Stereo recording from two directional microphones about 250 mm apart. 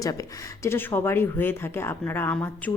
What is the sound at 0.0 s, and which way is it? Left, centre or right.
Speech, centre.